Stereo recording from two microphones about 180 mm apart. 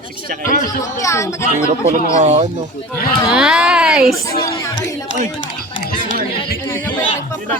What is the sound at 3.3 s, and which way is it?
Speech, 5° right (ahead or behind).